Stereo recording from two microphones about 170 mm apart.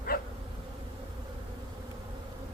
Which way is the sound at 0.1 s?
55° left (ahead or behind).